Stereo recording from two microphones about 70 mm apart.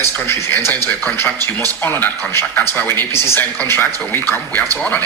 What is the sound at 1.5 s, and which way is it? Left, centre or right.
Speech, left.